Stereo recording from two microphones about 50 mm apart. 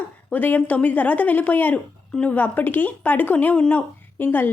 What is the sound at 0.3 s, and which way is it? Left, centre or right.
A woman's voice, left.